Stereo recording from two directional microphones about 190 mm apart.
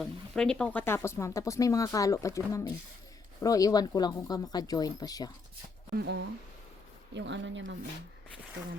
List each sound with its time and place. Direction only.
0.0 s speech: 5° left (ahead or behind); by 5.3 s 20° left (ahead or behind)
5.9 s speech: 60° right (ahead or behind)
7.1 s speech: 70° right (ahead or behind)